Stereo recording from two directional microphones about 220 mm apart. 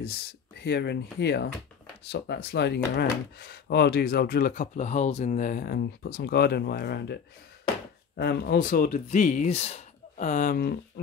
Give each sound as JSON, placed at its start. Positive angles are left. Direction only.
{"t": 0.0, "sound": "speech", "side_deg": 45}
{"t": 8.2, "sound": "speech", "side_deg": 45}